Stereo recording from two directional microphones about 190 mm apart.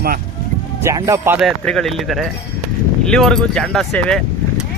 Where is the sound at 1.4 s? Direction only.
Centre (ahead or behind).